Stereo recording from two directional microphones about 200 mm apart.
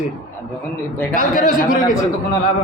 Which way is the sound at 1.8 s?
20° left (ahead or behind).